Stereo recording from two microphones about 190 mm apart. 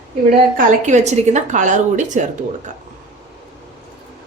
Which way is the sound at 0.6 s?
40° right (ahead or behind).